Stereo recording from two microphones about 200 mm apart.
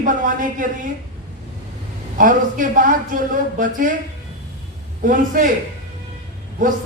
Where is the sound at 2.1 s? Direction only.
40° right (ahead or behind).